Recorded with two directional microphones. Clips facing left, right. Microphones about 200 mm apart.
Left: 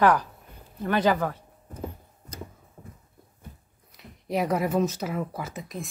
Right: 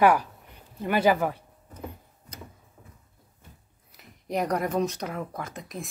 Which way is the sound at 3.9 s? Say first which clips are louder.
Left 1 dB; centre (ahead or behind).